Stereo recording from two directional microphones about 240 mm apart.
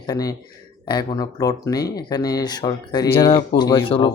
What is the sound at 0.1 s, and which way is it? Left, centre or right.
Speech, centre.